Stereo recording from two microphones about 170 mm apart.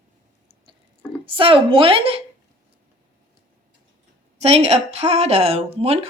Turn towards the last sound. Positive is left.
turn(degrees=-35)  # may be behind; listen again after turning